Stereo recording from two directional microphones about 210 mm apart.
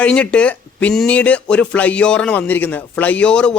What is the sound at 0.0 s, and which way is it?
A man's voice, 5° left (ahead or behind).